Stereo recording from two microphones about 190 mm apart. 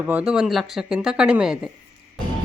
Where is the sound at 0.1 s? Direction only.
5° right (ahead or behind).